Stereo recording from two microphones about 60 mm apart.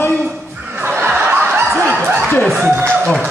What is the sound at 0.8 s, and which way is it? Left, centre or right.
Snicker, right.